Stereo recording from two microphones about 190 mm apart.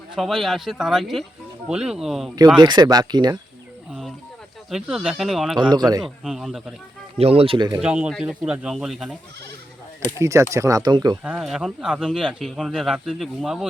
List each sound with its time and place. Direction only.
0.2 s speech: centre (ahead or behind)
2.6 s speech: 25° right (ahead or behind)
4.7 s speech: 5° right (ahead or behind)
5.5 s speech: 20° right (ahead or behind)
6.2 s speech: centre (ahead or behind)
7.2 s speech: 30° right (ahead or behind)
7.8 s speech: 5° right (ahead or behind)
10.2 s speech: 15° right (ahead or behind)
11.2 s speech: 5° right (ahead or behind)